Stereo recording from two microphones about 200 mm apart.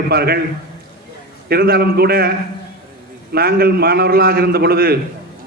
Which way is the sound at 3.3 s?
50° right (ahead or behind).